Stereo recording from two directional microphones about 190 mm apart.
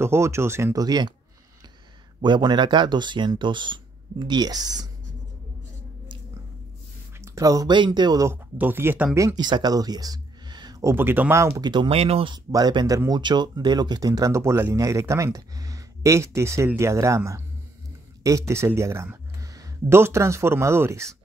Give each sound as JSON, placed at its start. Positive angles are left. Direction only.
{"t": 0.0, "sound": "speech", "side_deg": -15}
{"t": 2.2, "sound": "speech", "side_deg": -25}
{"t": 7.2, "sound": "speech", "side_deg": -15}
{"t": 12.4, "sound": "speech", "side_deg": -20}